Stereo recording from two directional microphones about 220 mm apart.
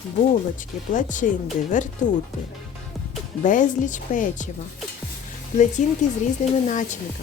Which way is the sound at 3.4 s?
35° left (ahead or behind).